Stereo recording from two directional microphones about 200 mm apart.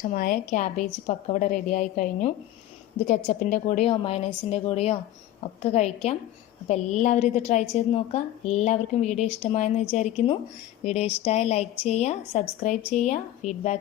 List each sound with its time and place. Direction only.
0.0 s a woman's voice: 45° left (ahead or behind)